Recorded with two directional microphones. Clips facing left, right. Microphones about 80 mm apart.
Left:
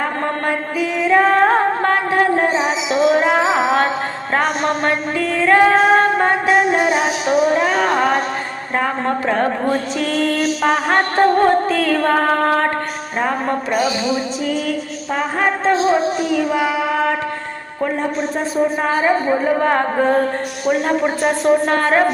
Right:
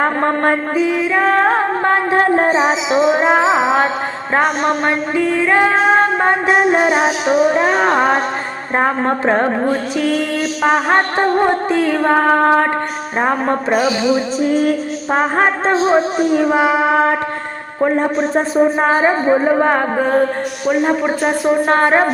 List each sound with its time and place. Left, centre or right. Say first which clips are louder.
0.0 s mantra: right 5 dB; right
1.0 s music: left 4 dB; centre
1.8 s music: right 2 dB; right
3.1 s music: right 1 dB; right
6.4 s a man's voice: right 2 dB; right
8.7 s music: right 3 dB; right
10.0 s music: right 1 dB; centre
13.1 s a man's voice: right 3 dB; right
14.4 s music: right 6 dB; right
17.9 s a man's voice: right 5 dB; right; by 19.8 s centre
20.0 s music: right 1 dB; centre
21.7 s a man's voice: right 3 dB; right